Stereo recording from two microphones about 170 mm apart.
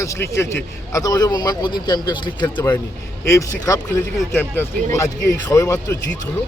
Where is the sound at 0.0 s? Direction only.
15° left (ahead or behind).